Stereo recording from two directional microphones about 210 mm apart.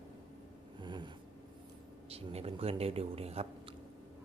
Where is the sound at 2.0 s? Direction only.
30° right (ahead or behind).